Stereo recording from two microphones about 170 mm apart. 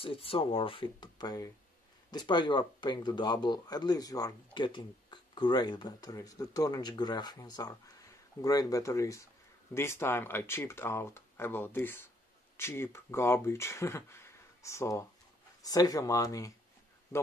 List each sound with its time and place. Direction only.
0.0 s speech: 30° left (ahead or behind)